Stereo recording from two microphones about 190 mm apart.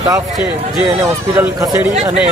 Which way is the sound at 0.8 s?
15° right (ahead or behind).